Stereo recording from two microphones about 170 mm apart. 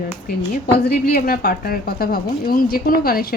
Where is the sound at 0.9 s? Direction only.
60° left (ahead or behind).